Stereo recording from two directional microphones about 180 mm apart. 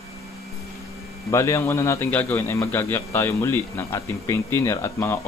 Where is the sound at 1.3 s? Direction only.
15° left (ahead or behind).